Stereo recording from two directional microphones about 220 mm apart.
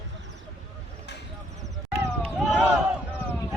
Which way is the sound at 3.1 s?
10° left (ahead or behind).